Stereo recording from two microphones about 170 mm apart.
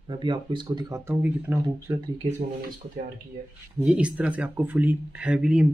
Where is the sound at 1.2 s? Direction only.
10° right (ahead or behind).